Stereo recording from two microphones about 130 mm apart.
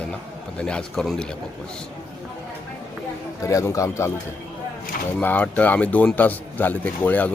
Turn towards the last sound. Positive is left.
turn(degrees=10)  # may be behind; listen again after turning